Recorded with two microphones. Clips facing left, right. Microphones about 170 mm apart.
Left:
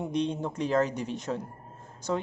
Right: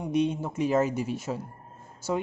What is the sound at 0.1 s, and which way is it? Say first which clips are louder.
Speech: right 6 dB; 10° right (ahead or behind).